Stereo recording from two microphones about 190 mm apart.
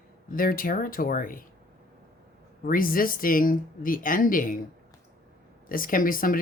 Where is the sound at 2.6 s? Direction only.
50° left (ahead or behind).